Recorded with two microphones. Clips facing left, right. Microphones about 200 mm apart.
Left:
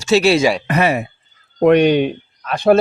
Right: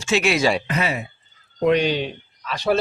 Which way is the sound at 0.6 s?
65° left (ahead or behind).